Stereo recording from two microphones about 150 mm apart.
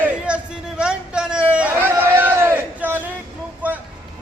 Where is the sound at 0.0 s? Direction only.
10° right (ahead or behind).